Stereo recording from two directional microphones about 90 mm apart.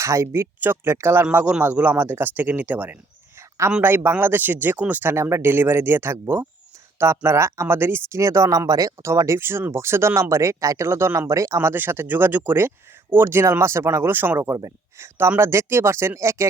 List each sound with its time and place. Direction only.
0.0 s speech: 30° right (ahead or behind)